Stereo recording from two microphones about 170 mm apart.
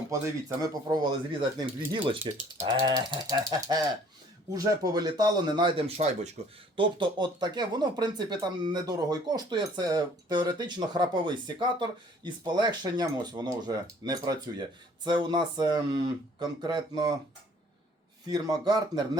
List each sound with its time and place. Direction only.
0.1 s speech: 20° right (ahead or behind)
6.4 s speech: 40° right (ahead or behind)
6.7 s speech: 25° right (ahead or behind)
18.3 s speech: 20° right (ahead or behind)